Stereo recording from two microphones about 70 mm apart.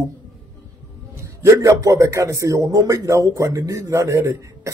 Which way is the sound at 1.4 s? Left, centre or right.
Right.